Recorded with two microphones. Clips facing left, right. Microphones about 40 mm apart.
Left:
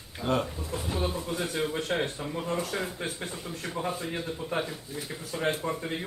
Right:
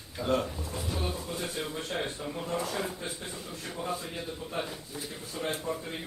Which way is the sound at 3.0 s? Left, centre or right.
Left.